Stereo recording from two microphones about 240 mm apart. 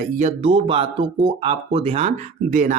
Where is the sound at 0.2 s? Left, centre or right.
Right.